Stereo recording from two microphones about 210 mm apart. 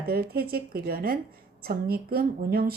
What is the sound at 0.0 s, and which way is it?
A woman's voice, 45° right (ahead or behind).